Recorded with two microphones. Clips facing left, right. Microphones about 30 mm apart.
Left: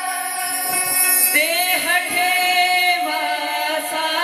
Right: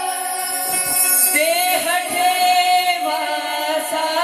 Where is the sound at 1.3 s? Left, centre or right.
Left.